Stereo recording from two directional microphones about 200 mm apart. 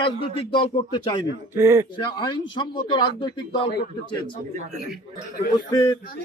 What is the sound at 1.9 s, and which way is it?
A man's voice, 20° left (ahead or behind).